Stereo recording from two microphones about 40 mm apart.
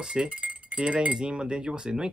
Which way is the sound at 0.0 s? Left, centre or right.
Right.